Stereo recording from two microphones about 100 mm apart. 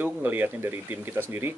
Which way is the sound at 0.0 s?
20° right (ahead or behind).